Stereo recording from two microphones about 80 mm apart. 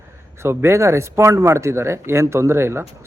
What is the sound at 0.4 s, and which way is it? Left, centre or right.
Speech, right.